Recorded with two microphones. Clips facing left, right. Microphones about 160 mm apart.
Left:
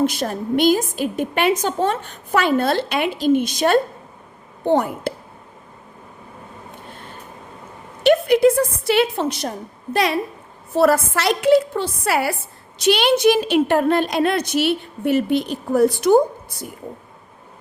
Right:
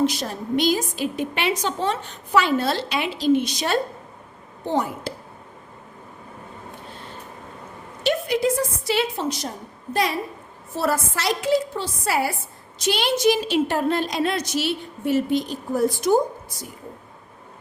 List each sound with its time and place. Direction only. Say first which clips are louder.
0.0 s a woman's voice: left 3 dB; 55° left (ahead or behind)
8.0 s a woman's voice: left 8 dB; 60° left (ahead or behind)